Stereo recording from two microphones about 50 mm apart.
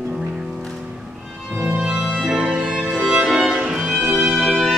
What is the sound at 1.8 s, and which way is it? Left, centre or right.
Music, centre.